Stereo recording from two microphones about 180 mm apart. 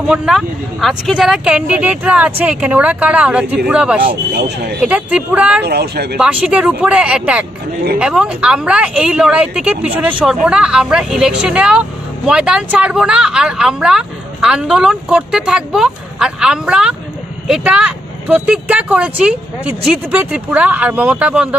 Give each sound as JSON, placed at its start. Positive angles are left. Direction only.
{"t": 0.1, "sound": "speech", "side_deg": -5}
{"t": 4.0, "sound": "speech", "side_deg": -55}
{"t": 4.7, "sound": "speech", "side_deg": -5}
{"t": 5.6, "sound": "speech", "side_deg": -65}
{"t": 6.1, "sound": "speech", "side_deg": -5}